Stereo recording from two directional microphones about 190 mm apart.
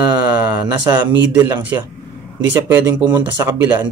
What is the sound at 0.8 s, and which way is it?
A man's voice, 10° right (ahead or behind).